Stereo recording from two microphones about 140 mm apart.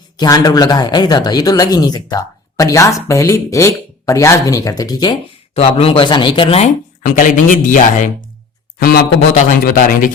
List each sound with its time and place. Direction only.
0.2 s speech: 30° left (ahead or behind)
5.5 s speech: 45° left (ahead or behind)
7.0 s speech: 70° left (ahead or behind)
8.8 s a man's voice: 90° left